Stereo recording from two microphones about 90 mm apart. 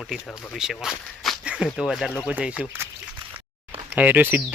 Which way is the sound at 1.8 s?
5° right (ahead or behind).